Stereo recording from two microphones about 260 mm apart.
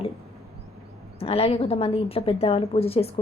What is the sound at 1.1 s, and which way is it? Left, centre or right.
A woman's voice, left.